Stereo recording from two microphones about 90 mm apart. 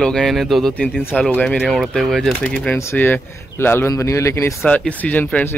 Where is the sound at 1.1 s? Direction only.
10° left (ahead or behind).